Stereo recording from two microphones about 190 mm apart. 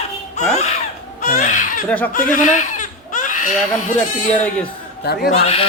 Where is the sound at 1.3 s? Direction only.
40° left (ahead or behind).